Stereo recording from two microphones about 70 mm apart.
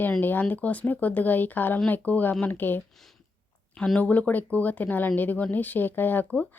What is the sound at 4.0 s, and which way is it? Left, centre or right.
Speech, left.